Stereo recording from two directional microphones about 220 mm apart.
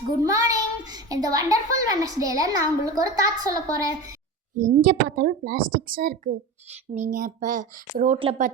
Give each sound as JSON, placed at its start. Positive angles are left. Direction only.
{"t": 0.2, "sound": "a child's voice", "side_deg": -15}
{"t": 4.8, "sound": "speech", "side_deg": -40}